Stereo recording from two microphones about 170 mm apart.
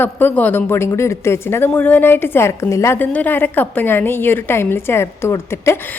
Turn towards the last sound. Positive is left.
turn(degrees=15)  # may be behind; listen again after turning